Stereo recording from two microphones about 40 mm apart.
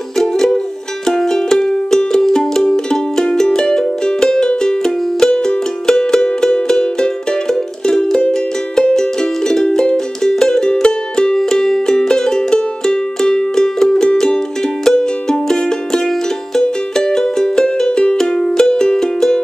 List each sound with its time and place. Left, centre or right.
0.2 s music: centre